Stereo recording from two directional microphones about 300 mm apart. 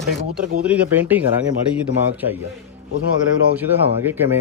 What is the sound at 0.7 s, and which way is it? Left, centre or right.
Speech, centre.